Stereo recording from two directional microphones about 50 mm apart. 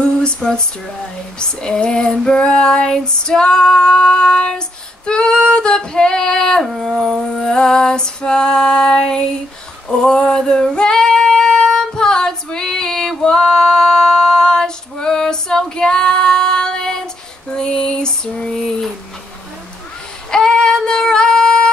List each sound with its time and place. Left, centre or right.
0.0 s a sound: centre
1.4 s child singing: centre
6.6 s dog: centre
7.4 s child singing: centre
9.8 s female singing: centre
17.6 s child singing: centre
20.2 s female singing: centre